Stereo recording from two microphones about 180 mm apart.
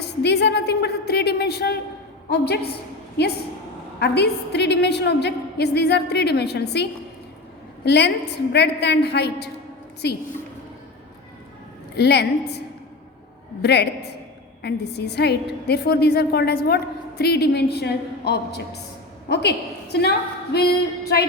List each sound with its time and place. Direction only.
0.0 s a woman's voice: 70° left (ahead or behind)
4.0 s a woman's voice: 65° left (ahead or behind)
7.9 s a woman's voice: 65° left (ahead or behind)
11.9 s a woman's voice: 65° left (ahead or behind)